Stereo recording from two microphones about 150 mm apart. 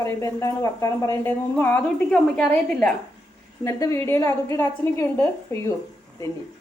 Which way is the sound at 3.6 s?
20° left (ahead or behind).